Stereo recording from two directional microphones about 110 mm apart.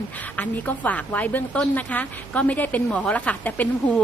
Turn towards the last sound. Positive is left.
turn(degrees=15)  # may be behind; listen again after turning